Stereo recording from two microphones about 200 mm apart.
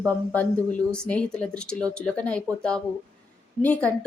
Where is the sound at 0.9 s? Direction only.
5° left (ahead or behind).